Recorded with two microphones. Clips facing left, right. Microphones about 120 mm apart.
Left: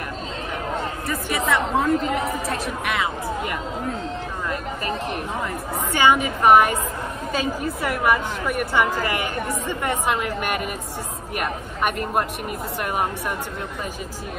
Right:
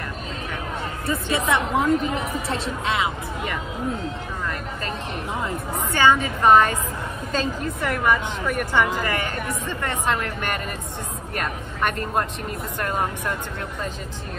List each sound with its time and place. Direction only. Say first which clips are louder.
1.0 s a woman's voice: right 4 dB; 25° right (ahead or behind)
5.9 s speech: even; 15° left (ahead or behind)